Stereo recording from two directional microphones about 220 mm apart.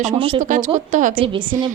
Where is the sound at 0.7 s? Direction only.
35° right (ahead or behind).